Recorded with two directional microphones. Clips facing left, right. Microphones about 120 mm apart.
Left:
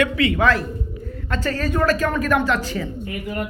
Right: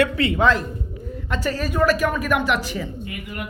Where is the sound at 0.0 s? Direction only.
30° right (ahead or behind); by 2.4 s 10° right (ahead or behind).